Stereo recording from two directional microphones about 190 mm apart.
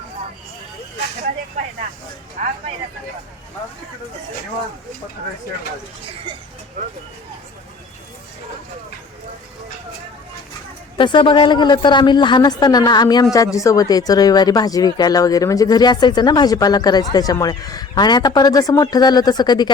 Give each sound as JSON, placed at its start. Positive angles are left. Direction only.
{"t": 2.4, "sound": "speech", "side_deg": -40}
{"t": 10.9, "sound": "speech", "side_deg": 25}